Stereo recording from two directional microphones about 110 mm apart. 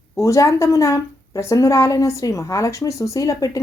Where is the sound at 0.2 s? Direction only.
30° left (ahead or behind).